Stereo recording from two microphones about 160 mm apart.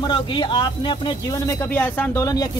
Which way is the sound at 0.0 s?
30° left (ahead or behind).